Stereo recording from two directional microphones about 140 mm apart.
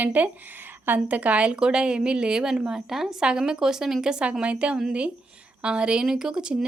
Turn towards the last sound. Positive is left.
turn(degrees=-5)  # may be behind; listen again after turning